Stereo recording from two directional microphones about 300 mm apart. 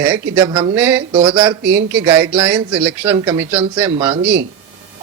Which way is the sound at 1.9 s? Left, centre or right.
Centre.